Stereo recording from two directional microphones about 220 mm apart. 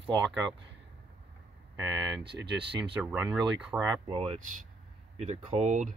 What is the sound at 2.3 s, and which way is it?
Speech, 50° right (ahead or behind).